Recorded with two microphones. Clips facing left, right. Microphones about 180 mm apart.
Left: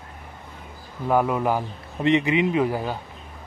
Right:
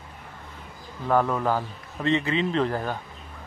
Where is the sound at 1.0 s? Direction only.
10° left (ahead or behind).